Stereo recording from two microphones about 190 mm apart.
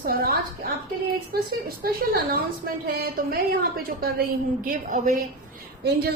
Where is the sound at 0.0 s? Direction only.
50° right (ahead or behind).